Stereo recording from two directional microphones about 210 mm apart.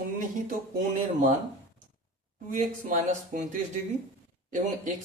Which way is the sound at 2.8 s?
35° right (ahead or behind).